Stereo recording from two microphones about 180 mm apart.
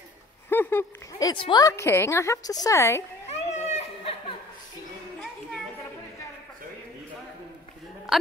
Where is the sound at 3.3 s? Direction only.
40° left (ahead or behind).